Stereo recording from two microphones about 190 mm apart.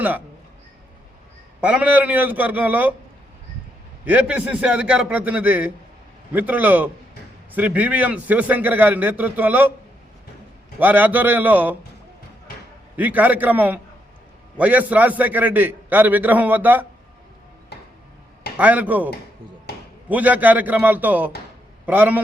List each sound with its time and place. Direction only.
1.6 s a man's voice: 5° right (ahead or behind)
4.0 s a man's voice: 5° right (ahead or behind)
10.8 s a man's voice: 10° right (ahead or behind)
13.0 s a man's voice: 10° right (ahead or behind)
18.5 s a man's voice: 10° right (ahead or behind)
19.7 s a sound: 60° left (ahead or behind)
20.1 s a man's voice: 10° right (ahead or behind)